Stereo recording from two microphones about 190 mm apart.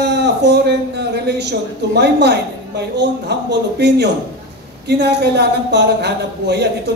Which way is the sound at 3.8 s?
60° right (ahead or behind).